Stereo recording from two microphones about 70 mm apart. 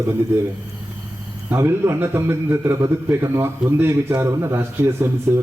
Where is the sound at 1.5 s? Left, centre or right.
Right.